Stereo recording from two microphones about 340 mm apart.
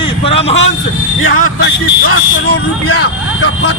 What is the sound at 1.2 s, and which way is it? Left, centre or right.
Speech, left.